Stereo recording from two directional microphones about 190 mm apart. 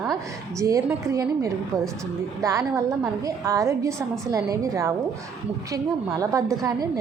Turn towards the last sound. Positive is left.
turn(degrees=-15)  # may be behind; listen again after turning